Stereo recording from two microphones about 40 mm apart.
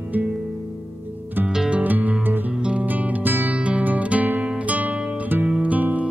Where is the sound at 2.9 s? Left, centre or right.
Right.